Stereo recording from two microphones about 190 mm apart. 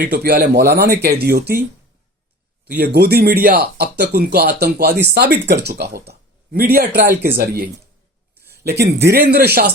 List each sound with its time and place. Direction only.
0.1 s speech: 55° right (ahead or behind)
2.7 s speech: 55° right (ahead or behind)
8.4 s speech: 60° right (ahead or behind)